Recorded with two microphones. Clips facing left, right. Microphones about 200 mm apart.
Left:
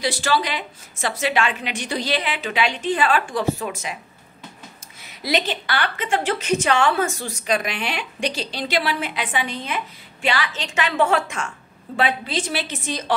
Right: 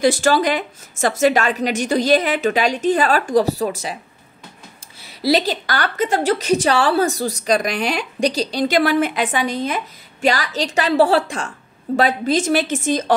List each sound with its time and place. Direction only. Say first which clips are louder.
0.0 s a woman's voice: right 7 dB; 45° right (ahead or behind)
5.0 s a woman's voice: right 6 dB; 35° right (ahead or behind)